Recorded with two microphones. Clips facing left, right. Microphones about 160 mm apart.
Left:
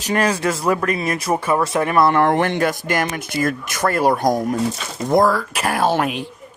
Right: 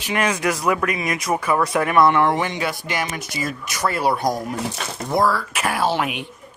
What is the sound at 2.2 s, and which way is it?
Speech, 55° left (ahead or behind).